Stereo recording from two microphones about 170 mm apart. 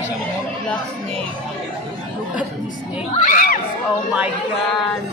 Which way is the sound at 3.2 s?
55° left (ahead or behind).